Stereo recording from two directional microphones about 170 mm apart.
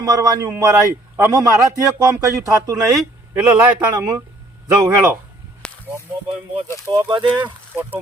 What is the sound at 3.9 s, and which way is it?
Speech, 20° right (ahead or behind).